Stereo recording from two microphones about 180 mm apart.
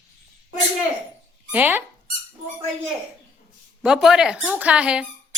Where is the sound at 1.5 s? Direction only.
10° right (ahead or behind).